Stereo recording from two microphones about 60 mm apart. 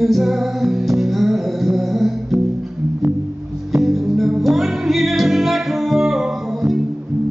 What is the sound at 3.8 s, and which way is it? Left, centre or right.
Music, centre.